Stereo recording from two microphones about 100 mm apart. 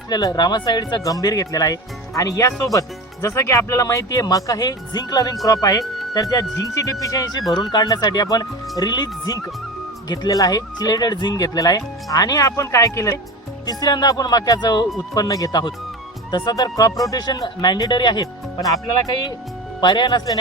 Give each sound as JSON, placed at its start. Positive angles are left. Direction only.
{"t": 0.1, "sound": "speech", "side_deg": 45}
{"t": 7.5, "sound": "speech", "side_deg": 50}
{"t": 13.7, "sound": "speech", "side_deg": 45}
{"t": 19.8, "sound": "speech", "side_deg": 50}